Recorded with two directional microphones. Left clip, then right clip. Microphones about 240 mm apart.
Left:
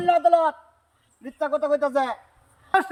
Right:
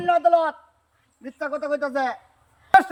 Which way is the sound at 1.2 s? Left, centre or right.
Centre.